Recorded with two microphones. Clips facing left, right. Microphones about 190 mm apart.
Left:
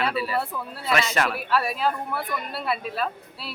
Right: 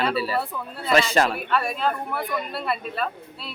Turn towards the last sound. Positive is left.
turn(degrees=0)  # may be behind; listen again after turning